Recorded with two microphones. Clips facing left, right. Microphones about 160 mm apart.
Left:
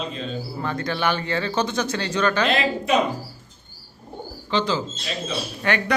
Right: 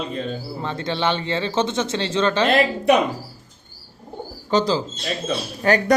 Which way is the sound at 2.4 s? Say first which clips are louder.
Right 5 dB; 55° right (ahead or behind).